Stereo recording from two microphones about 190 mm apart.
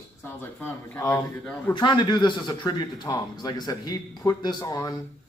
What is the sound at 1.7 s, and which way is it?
A man's voice, 25° left (ahead or behind).